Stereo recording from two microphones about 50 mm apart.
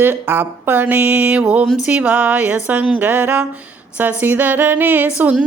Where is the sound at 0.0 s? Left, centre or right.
Right.